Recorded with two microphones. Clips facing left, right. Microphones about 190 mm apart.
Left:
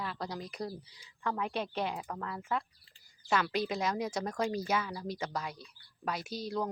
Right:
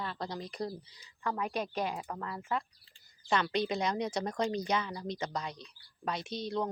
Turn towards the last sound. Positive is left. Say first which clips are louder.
# right 1 dB
turn(degrees=5)  # may be behind; listen again after turning